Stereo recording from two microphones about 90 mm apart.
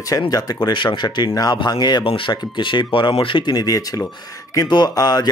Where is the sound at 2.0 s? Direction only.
80° left.